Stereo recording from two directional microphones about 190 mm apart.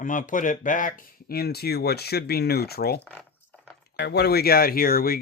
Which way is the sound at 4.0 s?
60° left (ahead or behind).